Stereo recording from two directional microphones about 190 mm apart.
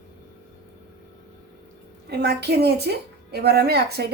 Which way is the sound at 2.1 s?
60° right (ahead or behind).